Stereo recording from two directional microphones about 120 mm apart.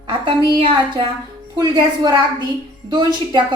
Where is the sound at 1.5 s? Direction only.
35° right (ahead or behind).